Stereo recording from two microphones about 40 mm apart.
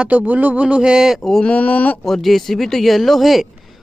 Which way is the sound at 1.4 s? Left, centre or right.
Left.